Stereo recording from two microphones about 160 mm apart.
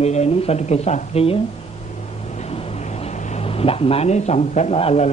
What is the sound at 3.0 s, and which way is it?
Speech, 40° left (ahead or behind).